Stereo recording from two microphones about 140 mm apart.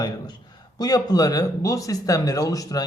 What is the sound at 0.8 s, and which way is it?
Speech, 25° left (ahead or behind).